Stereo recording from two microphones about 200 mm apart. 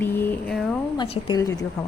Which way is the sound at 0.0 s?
10° left (ahead or behind).